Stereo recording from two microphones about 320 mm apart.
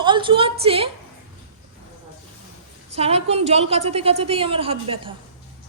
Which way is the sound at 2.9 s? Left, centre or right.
Centre.